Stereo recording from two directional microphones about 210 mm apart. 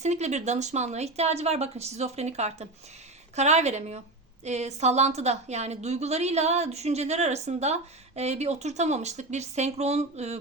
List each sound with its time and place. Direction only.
0.0 s a woman's voice: 35° right (ahead or behind)